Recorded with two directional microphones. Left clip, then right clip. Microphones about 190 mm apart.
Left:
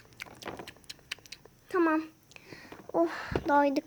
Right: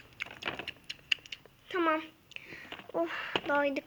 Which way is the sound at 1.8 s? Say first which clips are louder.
Left 2 dB; 65° left (ahead or behind).